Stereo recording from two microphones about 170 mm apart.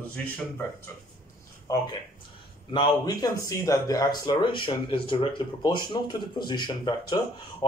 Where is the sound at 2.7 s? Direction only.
25° left (ahead or behind).